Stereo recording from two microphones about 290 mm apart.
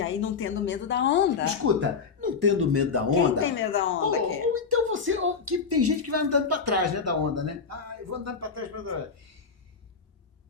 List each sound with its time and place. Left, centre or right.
0.0 s speech: left
2.2 s speech: right
3.4 s speech: left
4.5 s speech: right